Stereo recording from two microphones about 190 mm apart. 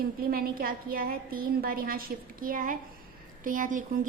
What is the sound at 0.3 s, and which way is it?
A woman's voice, 50° right (ahead or behind).